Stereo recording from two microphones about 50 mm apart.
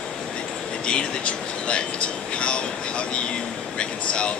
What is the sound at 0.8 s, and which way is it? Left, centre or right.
Speech, left.